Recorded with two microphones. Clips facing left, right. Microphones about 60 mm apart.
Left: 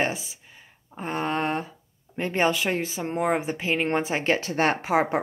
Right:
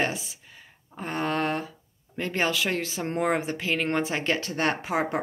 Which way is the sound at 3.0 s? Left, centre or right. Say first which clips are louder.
Right 1 dB; centre.